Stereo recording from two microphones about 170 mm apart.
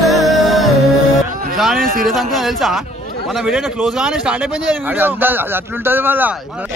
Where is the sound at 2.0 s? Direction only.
Centre (ahead or behind).